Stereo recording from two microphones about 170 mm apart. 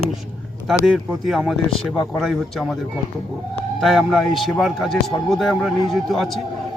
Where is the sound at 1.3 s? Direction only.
Centre (ahead or behind).